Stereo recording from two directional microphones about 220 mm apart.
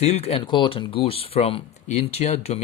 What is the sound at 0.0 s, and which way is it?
Speech, 25° left (ahead or behind).